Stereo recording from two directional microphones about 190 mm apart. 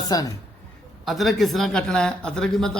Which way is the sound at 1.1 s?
Centre (ahead or behind).